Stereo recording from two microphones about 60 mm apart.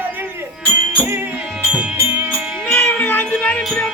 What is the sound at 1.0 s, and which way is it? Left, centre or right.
Music, right.